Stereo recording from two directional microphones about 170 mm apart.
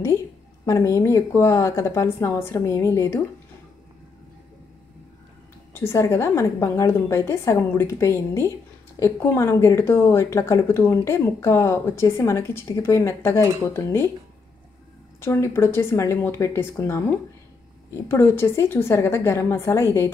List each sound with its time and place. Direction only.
0.7 s speech: 15° left (ahead or behind)
5.7 s speech: 15° left (ahead or behind)
15.1 s speech: 15° left (ahead or behind)